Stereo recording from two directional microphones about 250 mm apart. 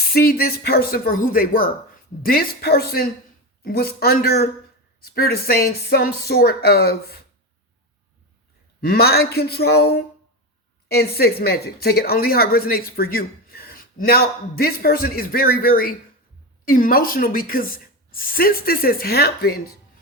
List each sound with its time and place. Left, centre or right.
0.1 s speech: left
8.8 s speech: left